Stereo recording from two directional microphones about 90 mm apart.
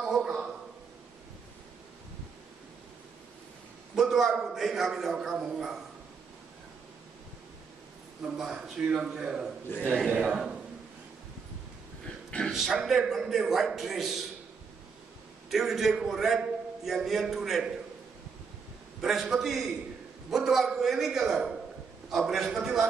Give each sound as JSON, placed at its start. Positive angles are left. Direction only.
{"t": 0.0, "sound": "a man's voice", "side_deg": -5}
{"t": 3.9, "sound": "a man's voice", "side_deg": 0}
{"t": 8.4, "sound": "a man's voice", "side_deg": -5}
{"t": 12.3, "sound": "a sound", "side_deg": 10}
{"t": 12.5, "sound": "a man's voice", "side_deg": -5}
{"t": 15.5, "sound": "a man's voice", "side_deg": -5}
{"t": 18.9, "sound": "a man's voice", "side_deg": -5}